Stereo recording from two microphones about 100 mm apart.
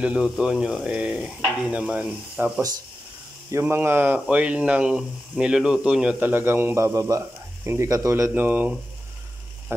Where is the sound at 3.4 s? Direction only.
25° right (ahead or behind); by 6.1 s 10° right (ahead or behind).